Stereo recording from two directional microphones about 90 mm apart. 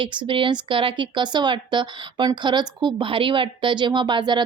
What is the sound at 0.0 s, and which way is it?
Speech, 65° right (ahead or behind).